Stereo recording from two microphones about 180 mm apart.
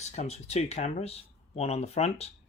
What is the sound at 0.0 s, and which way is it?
Speech, 35° left (ahead or behind).